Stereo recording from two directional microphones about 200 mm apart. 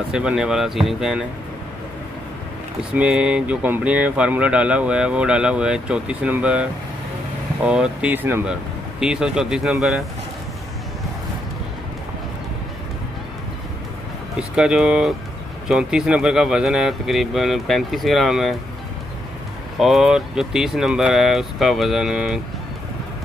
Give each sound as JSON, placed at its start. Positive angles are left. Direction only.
{"t": 0.1, "sound": "speech", "side_deg": -5}
{"t": 2.9, "sound": "speech", "side_deg": -5}
{"t": 14.5, "sound": "speech", "side_deg": -5}
{"t": 19.8, "sound": "speech", "side_deg": 0}